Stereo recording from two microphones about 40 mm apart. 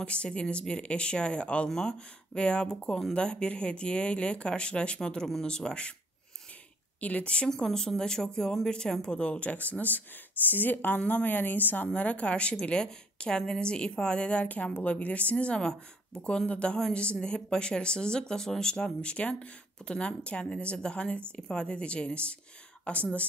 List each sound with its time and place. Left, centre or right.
0.0 s speech: left
1.7 s speech: centre
7.0 s a woman's voice: left
7.4 s speech: centre
9.2 s speech: left
11.0 s a woman's voice: left
11.2 s a woman's voice: left
12.8 s speech: centre
14.4 s a woman's voice: left